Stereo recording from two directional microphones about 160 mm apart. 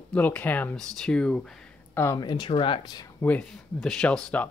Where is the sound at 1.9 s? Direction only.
15° left (ahead or behind).